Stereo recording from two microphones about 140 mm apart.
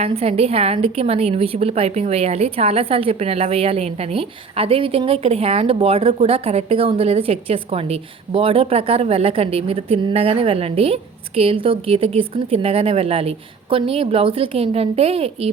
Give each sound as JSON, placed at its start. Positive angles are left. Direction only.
{"t": 0.0, "sound": "a woman's voice", "side_deg": -45}